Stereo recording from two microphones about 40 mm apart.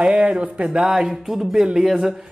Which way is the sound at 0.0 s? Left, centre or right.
Right.